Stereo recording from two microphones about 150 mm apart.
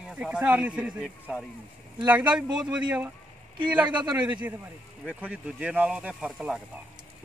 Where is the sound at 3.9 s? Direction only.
30° right (ahead or behind).